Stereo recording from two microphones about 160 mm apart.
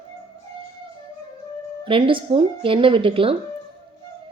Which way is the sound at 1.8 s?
30° right (ahead or behind).